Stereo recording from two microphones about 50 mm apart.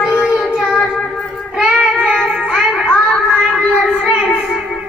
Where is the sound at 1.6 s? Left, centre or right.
Centre.